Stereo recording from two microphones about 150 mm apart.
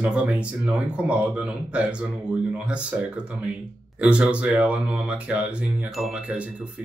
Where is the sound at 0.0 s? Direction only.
10° right (ahead or behind).